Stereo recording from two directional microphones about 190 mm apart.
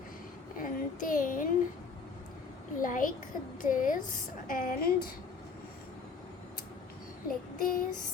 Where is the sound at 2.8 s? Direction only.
45° left (ahead or behind).